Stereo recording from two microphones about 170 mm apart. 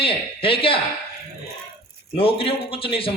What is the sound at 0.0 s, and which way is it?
Speech, 35° left (ahead or behind).